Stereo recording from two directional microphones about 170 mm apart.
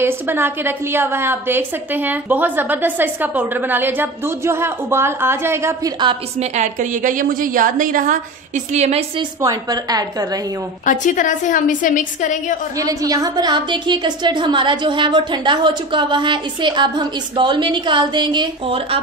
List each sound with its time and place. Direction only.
0.0 s a woman's voice: 15° right (ahead or behind)
6.5 s a woman's voice: 45° right (ahead or behind)
8.7 s a woman's voice: 40° right (ahead or behind)
9.4 s a woman's voice: 20° right (ahead or behind)
10.9 s a woman's voice: 50° left (ahead or behind)
12.7 s a woman's voice: 20° right (ahead or behind)